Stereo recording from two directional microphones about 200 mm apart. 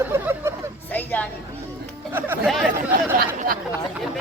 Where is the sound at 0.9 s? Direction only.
10° left (ahead or behind).